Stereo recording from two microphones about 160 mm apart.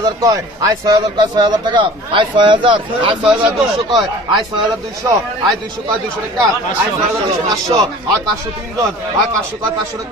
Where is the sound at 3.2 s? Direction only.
5° right (ahead or behind).